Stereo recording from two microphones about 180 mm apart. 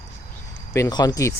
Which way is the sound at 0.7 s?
20° left (ahead or behind).